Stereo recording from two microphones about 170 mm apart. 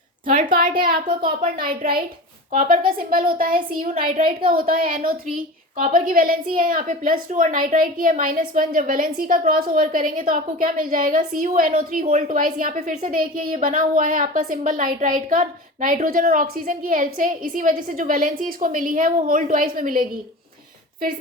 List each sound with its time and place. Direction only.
0.3 s a woman's voice: 50° right (ahead or behind)